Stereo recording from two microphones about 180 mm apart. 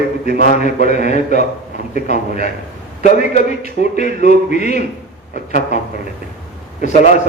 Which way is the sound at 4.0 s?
40° left (ahead or behind).